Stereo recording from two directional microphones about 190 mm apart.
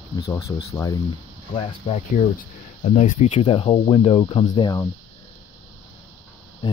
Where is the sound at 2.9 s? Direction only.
35° left (ahead or behind).